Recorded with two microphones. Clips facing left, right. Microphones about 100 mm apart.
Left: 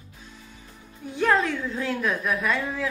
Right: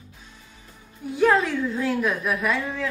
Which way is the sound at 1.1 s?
Centre (ahead or behind).